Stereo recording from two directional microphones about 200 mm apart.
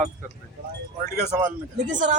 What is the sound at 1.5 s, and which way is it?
Speech, 40° right (ahead or behind).